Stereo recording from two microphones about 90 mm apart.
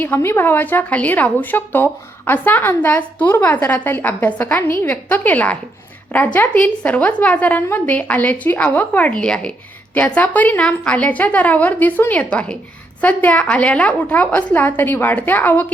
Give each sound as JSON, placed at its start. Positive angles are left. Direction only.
{"t": 0.0, "sound": "a woman's voice", "side_deg": 25}